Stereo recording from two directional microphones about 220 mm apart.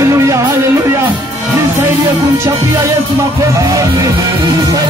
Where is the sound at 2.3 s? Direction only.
10° right (ahead or behind).